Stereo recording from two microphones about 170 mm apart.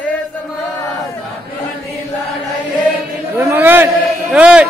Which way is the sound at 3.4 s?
15° right (ahead or behind).